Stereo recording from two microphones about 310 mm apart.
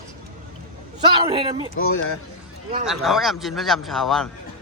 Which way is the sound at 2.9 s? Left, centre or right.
Centre.